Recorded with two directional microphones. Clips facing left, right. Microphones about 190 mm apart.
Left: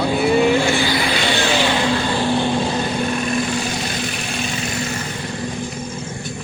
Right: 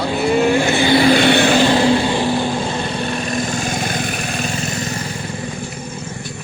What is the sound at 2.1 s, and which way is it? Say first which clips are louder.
Vehicle: even; 10° right (ahead or behind).